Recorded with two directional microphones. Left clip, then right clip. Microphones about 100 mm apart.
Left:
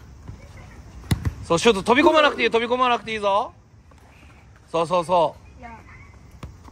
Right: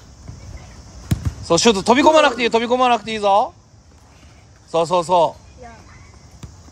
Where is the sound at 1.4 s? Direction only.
45° right (ahead or behind).